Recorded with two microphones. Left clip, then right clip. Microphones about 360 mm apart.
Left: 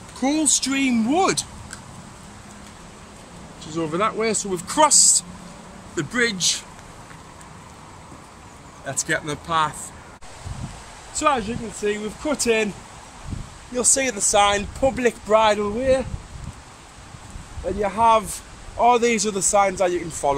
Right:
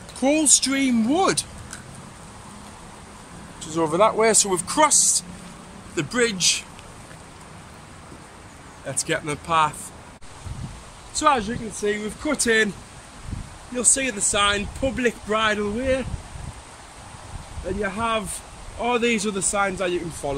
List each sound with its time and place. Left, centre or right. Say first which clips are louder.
0.2 s speech: right 2 dB; centre
3.9 s speech: right 5 dB; centre
4.6 s speech: left 4 dB; centre
8.8 s speech: left 1 dB; centre
11.1 s speech: right 1 dB; centre
13.7 s speech: left 2 dB; centre
17.8 s speech: left 8 dB; centre
20.2 s speech: left 9 dB; left